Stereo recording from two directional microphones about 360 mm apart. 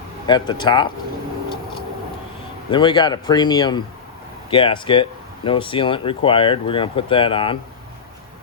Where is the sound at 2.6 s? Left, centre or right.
Centre.